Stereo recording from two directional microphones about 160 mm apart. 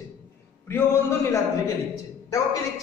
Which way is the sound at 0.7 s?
15° left (ahead or behind).